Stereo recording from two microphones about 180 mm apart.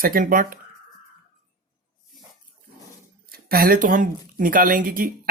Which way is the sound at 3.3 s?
55° right (ahead or behind).